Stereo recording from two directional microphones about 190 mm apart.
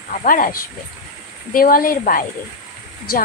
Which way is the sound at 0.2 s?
45° left (ahead or behind).